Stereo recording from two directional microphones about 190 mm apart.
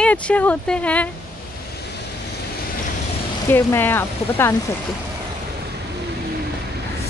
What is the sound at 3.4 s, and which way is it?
Speech, 10° left (ahead or behind).